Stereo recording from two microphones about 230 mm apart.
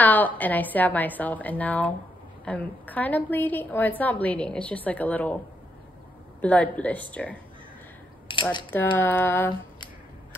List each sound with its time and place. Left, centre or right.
0.0 s a woman's voice: centre
6.4 s a woman's voice: centre
8.3 s a sound: left
8.7 s a woman's voice: centre